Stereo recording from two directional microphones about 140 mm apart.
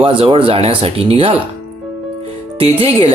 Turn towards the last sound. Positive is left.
turn(degrees=-45)  # may be behind; listen again after turning